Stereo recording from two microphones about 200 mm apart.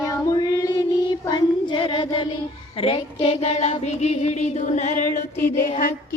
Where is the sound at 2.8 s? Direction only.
30° left (ahead or behind).